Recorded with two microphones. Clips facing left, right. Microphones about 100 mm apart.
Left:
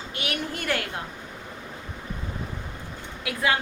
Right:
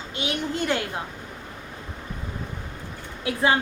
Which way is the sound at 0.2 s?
20° right (ahead or behind).